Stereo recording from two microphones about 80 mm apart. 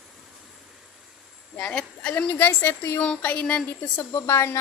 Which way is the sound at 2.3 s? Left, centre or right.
Left.